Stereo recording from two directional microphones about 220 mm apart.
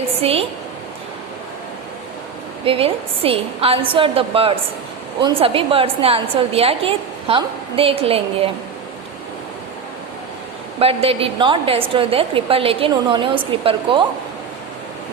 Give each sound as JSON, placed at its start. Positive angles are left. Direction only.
{"t": 0.2, "sound": "a woman's voice", "side_deg": -25}
{"t": 2.6, "sound": "a woman's voice", "side_deg": -25}
{"t": 10.8, "sound": "a woman's voice", "side_deg": -25}